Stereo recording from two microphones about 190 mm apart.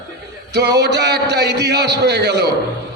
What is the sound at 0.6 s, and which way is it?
A man's voice, 60° right (ahead or behind).